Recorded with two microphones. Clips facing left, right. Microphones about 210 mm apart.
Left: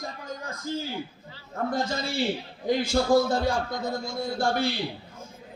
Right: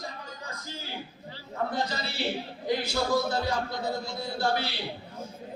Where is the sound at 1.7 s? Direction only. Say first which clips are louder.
Left 4 dB; 50° left (ahead or behind).